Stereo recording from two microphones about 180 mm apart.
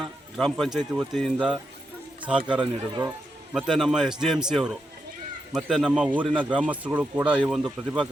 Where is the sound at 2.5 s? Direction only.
25° right (ahead or behind).